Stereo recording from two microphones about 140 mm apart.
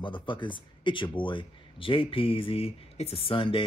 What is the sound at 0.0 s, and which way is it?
Speech, 35° left (ahead or behind).